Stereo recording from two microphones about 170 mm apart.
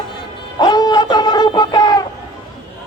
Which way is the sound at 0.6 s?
25° left (ahead or behind).